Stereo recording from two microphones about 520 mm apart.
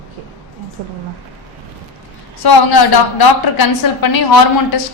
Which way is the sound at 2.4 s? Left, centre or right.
Left.